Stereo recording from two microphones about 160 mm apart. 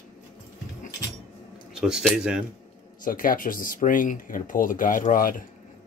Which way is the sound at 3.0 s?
60° left (ahead or behind).